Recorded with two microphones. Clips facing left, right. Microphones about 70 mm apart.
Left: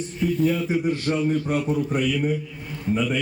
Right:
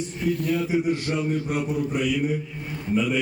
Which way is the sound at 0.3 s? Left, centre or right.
Centre.